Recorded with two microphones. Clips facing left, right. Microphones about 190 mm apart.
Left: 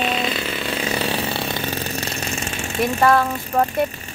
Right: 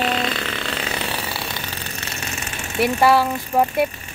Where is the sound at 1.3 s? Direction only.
55° left (ahead or behind).